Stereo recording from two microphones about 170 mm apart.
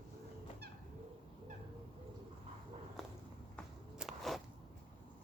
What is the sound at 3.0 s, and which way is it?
Walk, centre (ahead or behind).